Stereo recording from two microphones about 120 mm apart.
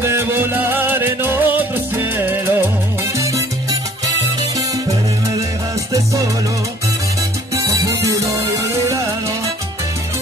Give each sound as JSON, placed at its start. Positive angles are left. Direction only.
{"t": 0.0, "sound": "music", "side_deg": -20}
{"t": 7.5, "sound": "music", "side_deg": -25}